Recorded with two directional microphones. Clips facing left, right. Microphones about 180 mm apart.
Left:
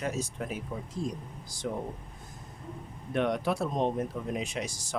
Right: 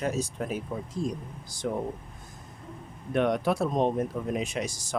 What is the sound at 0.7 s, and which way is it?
Speech, 75° right (ahead or behind).